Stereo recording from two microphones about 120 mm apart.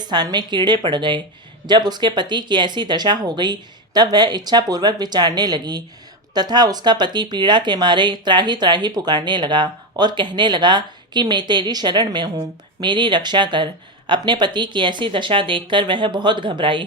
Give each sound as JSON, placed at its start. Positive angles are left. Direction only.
{"t": 0.0, "sound": "speech", "side_deg": -35}